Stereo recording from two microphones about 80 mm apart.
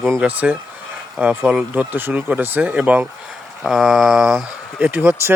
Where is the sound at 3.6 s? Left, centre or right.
Centre.